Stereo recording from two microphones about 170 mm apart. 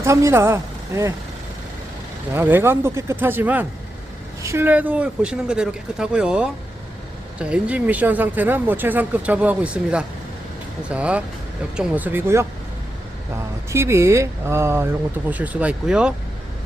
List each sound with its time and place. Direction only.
0.0 s speech: 15° right (ahead or behind)
2.3 s speech: 10° right (ahead or behind)